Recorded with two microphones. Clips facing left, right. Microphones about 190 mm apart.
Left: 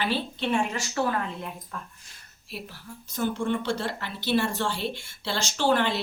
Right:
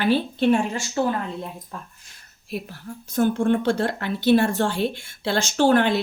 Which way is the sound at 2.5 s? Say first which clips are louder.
Right 8 dB; 50° right (ahead or behind).